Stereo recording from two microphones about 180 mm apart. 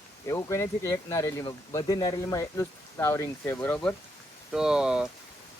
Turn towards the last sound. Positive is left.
turn(degrees=-5)  # may be behind; listen again after turning